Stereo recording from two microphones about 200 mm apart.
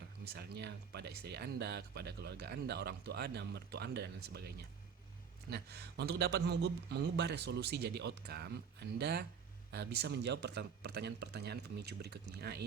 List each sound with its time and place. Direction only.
0.3 s speech: 55° right (ahead or behind)